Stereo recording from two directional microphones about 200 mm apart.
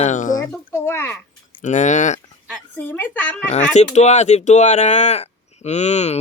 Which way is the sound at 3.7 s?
35° left (ahead or behind).